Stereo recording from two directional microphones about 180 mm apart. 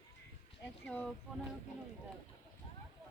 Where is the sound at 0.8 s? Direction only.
10° left (ahead or behind).